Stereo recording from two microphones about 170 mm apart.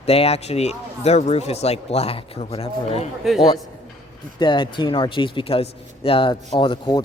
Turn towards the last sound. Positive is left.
turn(degrees=25)  # may be behind; listen again after turning